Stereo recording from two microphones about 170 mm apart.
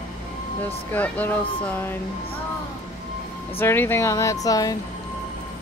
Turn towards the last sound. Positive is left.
turn(degrees=20)  # may be behind; listen again after turning